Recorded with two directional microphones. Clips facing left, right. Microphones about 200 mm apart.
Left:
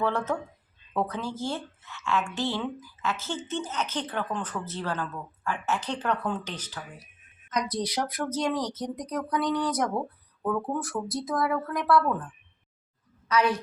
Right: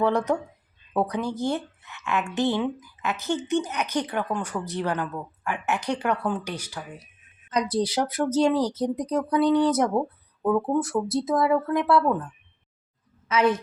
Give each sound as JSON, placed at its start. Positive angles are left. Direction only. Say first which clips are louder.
{"t": 0.0, "sound": "speech", "louder": "right 5 dB", "side_deg": -15}
{"t": 7.5, "sound": "speech", "louder": "right 5 dB", "side_deg": -30}
{"t": 13.2, "sound": "a woman's voice", "louder": "right 3 dB", "side_deg": -20}